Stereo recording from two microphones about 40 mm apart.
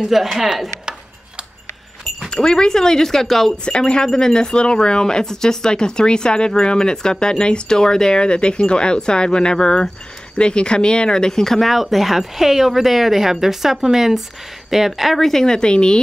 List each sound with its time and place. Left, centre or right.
0.0 s speech: centre
2.3 s speech: centre
3.6 s speech: left; by 15.4 s centre
15.4 s speech: centre